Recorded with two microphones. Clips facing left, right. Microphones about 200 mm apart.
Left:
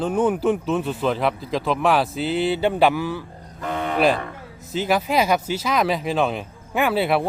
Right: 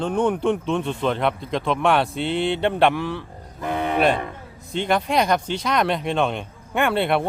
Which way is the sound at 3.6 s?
15° right (ahead or behind).